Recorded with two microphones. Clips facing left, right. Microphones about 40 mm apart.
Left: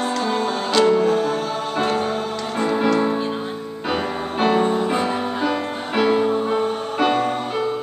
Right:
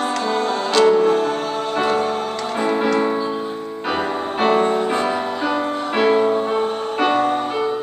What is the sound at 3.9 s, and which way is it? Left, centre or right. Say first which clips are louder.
Music: right 1 dB; centre.